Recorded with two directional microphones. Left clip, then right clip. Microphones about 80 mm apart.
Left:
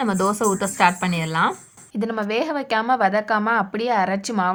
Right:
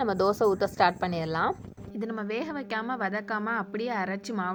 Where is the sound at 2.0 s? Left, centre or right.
Right.